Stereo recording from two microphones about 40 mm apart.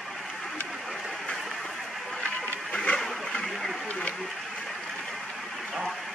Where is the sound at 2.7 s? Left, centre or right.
Left.